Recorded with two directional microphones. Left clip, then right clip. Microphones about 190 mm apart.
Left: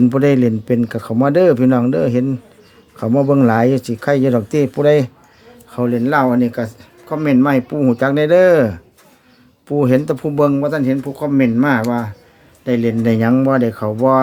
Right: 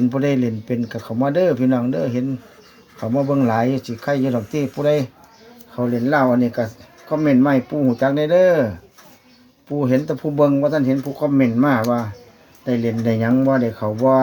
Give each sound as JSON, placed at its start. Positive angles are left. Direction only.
{"t": 0.1, "sound": "speech", "side_deg": 50}
{"t": 5.7, "sound": "speech", "side_deg": 30}